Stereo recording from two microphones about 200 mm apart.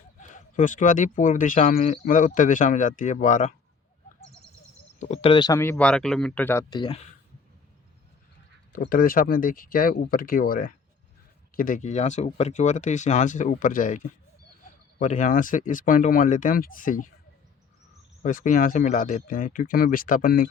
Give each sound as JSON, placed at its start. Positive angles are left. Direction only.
{"t": 0.2, "sound": "speech", "side_deg": 40}
{"t": 4.9, "sound": "speech", "side_deg": 35}
{"t": 8.8, "sound": "speech", "side_deg": 45}
{"t": 18.2, "sound": "speech", "side_deg": 40}